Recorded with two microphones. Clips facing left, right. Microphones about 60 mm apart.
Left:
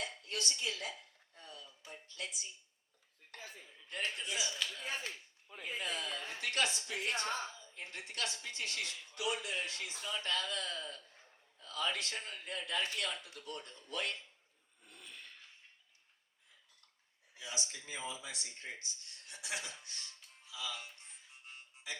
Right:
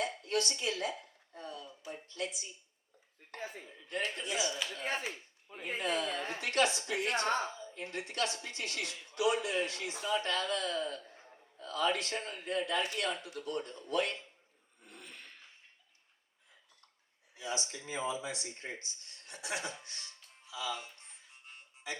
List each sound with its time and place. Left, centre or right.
0.2 s speech: right
3.3 s speech: right
4.7 s speech: right
7.5 s a woman's voice: right
14.8 s a sound: right
17.3 s speech: right